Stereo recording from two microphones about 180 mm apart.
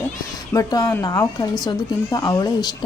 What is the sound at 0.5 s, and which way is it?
Speech, 20° left (ahead or behind).